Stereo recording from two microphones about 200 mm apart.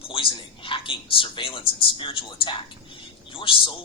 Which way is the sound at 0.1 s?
25° left (ahead or behind).